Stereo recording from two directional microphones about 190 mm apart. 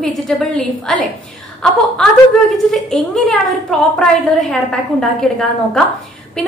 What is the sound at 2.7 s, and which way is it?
A woman's voice, centre (ahead or behind).